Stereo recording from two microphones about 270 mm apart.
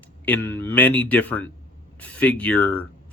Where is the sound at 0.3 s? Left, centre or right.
Centre.